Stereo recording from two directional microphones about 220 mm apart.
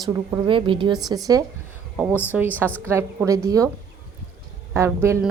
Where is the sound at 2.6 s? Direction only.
5° left (ahead or behind).